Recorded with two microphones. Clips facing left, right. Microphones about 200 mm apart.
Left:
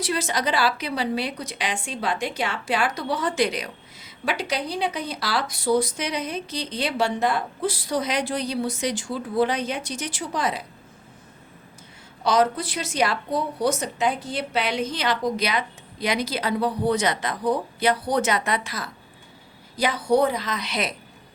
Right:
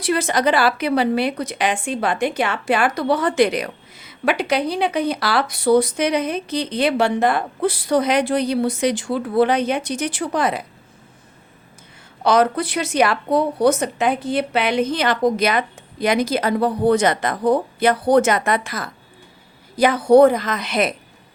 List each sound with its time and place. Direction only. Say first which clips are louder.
0.0 s a woman's voice: right 7 dB; 55° right (ahead or behind)
12.2 s a woman's voice: right 4 dB; 60° right (ahead or behind)